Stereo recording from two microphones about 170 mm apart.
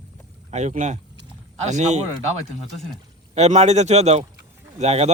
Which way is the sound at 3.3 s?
40° right (ahead or behind).